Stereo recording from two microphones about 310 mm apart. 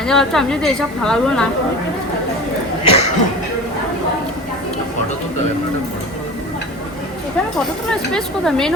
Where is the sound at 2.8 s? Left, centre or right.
Left.